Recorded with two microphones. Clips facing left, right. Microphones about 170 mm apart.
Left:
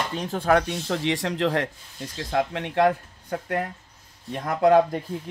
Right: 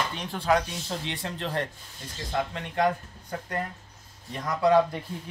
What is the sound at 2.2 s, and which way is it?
A man's voice, 65° left (ahead or behind).